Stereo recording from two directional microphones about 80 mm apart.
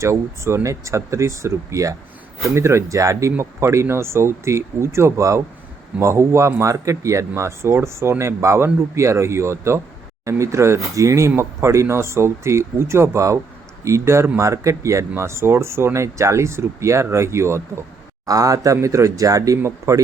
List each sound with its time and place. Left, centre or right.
0.0 s speech: right
18.3 s speech: right